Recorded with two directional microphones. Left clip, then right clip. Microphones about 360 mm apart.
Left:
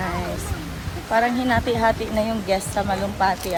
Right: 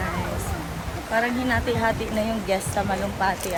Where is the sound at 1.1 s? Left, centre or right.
Centre.